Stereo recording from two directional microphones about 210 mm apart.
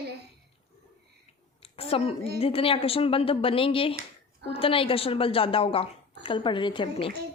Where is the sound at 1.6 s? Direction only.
30° left (ahead or behind).